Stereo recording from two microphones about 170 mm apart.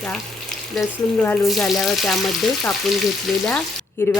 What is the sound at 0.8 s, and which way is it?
Speech, 5° left (ahead or behind).